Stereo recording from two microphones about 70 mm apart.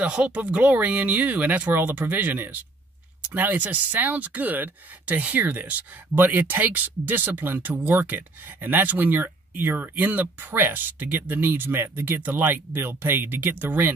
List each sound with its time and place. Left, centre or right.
0.0 s speech: centre